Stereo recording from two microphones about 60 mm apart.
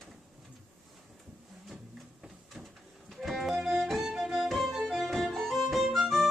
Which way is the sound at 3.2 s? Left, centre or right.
Centre.